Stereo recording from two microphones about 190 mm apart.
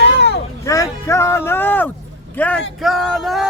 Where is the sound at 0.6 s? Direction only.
15° left (ahead or behind).